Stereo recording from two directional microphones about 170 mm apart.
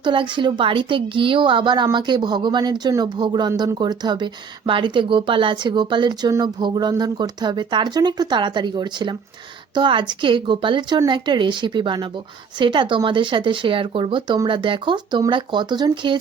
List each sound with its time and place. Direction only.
0.0 s a woman's voice: 30° right (ahead or behind)